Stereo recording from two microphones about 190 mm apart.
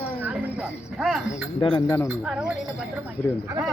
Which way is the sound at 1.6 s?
25° left (ahead or behind).